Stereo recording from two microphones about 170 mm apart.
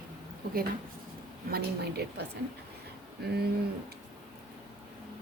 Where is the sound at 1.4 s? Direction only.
70° right (ahead or behind).